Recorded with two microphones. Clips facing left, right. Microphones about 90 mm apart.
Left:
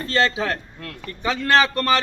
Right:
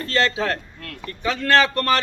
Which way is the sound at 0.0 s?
20° left (ahead or behind).